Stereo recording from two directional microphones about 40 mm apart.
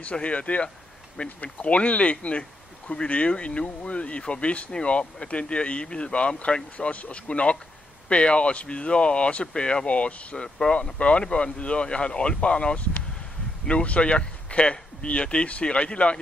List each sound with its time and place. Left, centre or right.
0.0 s speech: left